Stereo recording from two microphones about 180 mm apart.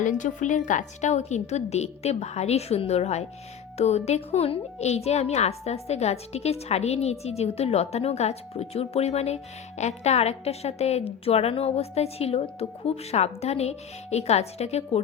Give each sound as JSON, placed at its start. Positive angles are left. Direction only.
{"t": 0.0, "sound": "a woman's voice", "side_deg": 45}